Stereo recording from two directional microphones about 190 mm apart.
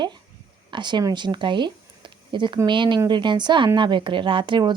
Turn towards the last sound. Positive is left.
turn(degrees=-25)  # may be behind; listen again after turning